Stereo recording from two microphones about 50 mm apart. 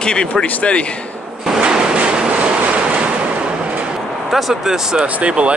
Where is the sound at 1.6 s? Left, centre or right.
Centre.